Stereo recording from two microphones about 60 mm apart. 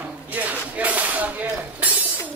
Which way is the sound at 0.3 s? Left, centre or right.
Right.